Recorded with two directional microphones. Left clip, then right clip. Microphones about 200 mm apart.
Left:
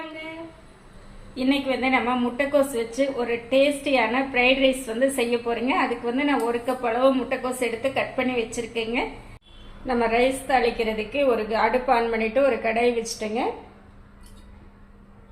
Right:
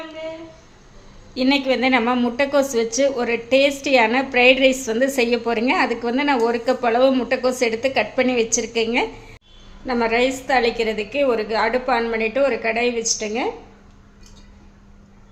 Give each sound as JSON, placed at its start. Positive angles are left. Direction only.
{"t": 1.4, "sound": "a woman's voice", "side_deg": -60}
{"t": 9.8, "sound": "a woman's voice", "side_deg": -25}